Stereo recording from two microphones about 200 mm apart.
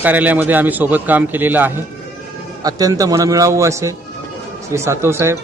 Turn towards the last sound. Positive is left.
turn(degrees=-15)  # may be behind; listen again after turning